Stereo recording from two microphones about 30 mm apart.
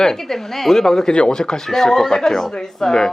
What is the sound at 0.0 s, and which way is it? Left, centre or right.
Speech, centre.